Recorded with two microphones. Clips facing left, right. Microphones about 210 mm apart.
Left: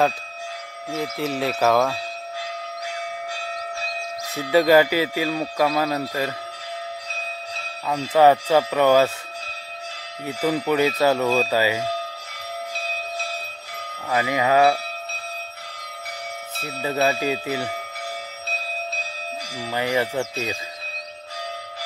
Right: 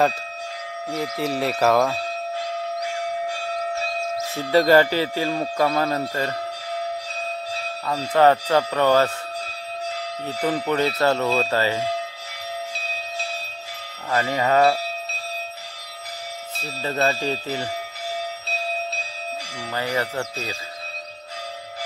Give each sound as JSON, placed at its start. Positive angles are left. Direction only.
{"t": 0.9, "sound": "speech", "side_deg": 0}
{"t": 4.5, "sound": "speech", "side_deg": 10}
{"t": 7.9, "sound": "speech", "side_deg": 10}
{"t": 10.2, "sound": "speech", "side_deg": 10}
{"t": 14.0, "sound": "speech", "side_deg": 10}
{"t": 16.6, "sound": "speech", "side_deg": 10}
{"t": 19.7, "sound": "speech", "side_deg": 15}